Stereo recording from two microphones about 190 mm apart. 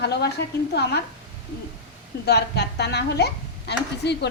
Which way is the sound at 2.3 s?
60° left (ahead or behind).